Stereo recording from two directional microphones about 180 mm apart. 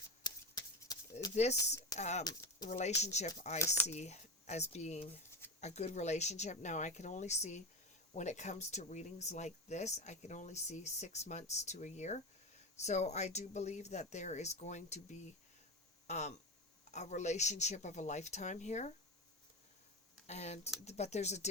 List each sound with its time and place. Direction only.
0.2 s a sound: 20° left (ahead or behind)
1.2 s speech: 40° left (ahead or behind)
3.6 s speech: 15° left (ahead or behind)
3.8 s speech: 40° left (ahead or behind)
20.2 s speech: 35° left (ahead or behind)